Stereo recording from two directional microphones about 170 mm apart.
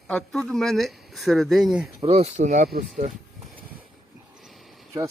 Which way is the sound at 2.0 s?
40° right (ahead or behind).